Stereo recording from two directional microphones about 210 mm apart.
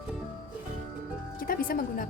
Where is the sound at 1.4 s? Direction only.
40° left (ahead or behind).